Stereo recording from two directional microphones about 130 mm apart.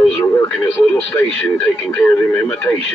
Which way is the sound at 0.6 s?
15° left (ahead or behind).